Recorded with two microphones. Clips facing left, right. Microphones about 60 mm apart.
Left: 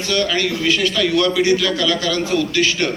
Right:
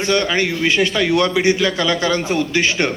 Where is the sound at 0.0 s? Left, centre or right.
Right.